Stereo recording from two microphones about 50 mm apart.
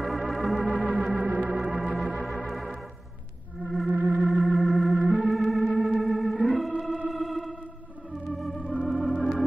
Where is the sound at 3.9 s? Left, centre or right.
Right.